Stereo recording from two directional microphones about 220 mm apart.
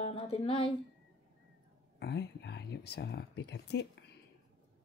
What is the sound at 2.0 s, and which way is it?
Speech, 50° left (ahead or behind).